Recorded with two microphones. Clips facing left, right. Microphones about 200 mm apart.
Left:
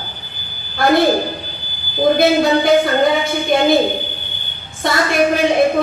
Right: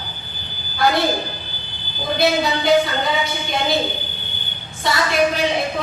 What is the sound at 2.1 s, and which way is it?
Music, 50° left (ahead or behind).